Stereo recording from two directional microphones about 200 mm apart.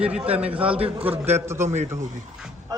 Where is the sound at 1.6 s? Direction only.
35° right (ahead or behind).